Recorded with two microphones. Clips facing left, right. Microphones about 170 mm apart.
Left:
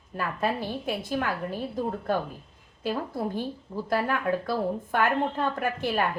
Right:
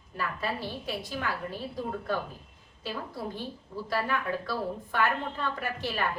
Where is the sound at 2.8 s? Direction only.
50° left (ahead or behind).